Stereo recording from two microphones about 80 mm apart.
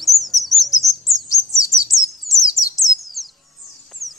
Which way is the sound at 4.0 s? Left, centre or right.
Centre.